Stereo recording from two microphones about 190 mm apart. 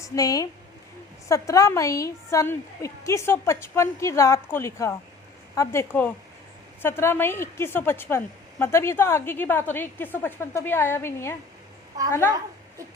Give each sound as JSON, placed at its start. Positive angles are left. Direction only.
{"t": 0.0, "sound": "a woman's voice", "side_deg": 20}